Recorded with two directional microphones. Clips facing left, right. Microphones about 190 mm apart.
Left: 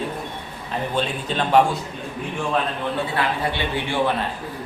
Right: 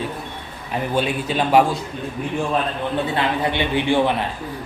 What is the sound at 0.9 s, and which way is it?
Speech, 10° right (ahead or behind).